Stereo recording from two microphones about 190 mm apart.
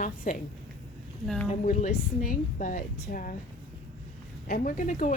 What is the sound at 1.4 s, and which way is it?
A woman's voice, 40° left (ahead or behind).